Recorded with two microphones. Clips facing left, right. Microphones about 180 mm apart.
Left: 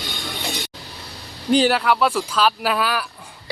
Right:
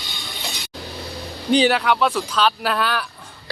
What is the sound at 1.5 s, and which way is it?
Speech, 5° left (ahead or behind).